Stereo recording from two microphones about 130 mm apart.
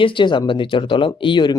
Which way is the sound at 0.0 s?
40° left (ahead or behind).